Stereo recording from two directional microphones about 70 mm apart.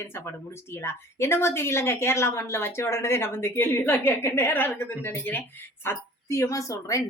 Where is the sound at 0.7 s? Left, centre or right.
Left.